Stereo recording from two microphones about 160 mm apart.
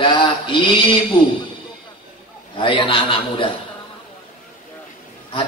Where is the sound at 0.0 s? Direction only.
30° left (ahead or behind).